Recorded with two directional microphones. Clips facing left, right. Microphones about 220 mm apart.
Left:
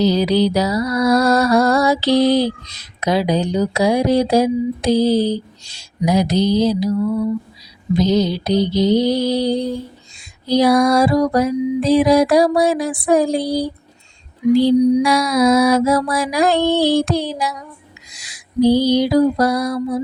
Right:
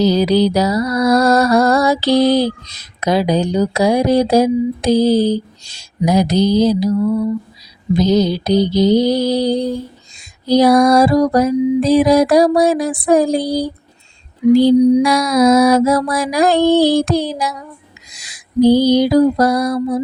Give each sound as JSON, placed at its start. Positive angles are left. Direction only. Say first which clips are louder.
{"t": 0.0, "sound": "music", "louder": "right 2 dB", "side_deg": -40}
{"t": 7.9, "sound": "music", "louder": "right 2 dB", "side_deg": -40}
{"t": 14.5, "sound": "mantra", "louder": "right 3 dB", "side_deg": -45}
{"t": 15.0, "sound": "music", "louder": "right 2 dB", "side_deg": -45}
{"t": 18.2, "sound": "mantra", "louder": "right 3 dB", "side_deg": -45}